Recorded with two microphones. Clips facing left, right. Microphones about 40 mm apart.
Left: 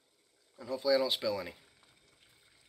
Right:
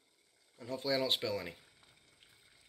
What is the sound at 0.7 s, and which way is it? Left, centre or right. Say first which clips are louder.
Speech: left 4 dB; right.